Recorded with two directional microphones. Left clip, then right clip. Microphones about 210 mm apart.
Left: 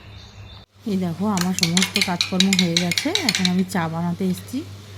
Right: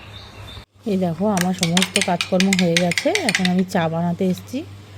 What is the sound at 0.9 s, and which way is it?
Speech, 15° right (ahead or behind).